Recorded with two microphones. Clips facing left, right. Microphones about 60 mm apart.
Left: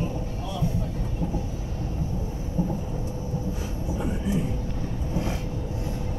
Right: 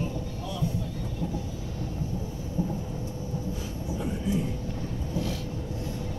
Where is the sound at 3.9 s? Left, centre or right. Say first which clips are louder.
Left 1 dB; left.